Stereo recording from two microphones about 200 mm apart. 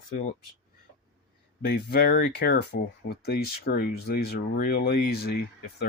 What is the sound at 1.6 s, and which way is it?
Speech, 55° left (ahead or behind).